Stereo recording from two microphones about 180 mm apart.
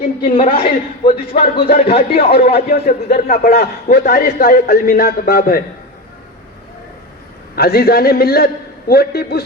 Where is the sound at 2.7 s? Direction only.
55° left (ahead or behind).